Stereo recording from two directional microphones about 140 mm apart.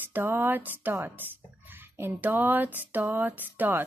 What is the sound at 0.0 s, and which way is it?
Speech, 15° right (ahead or behind).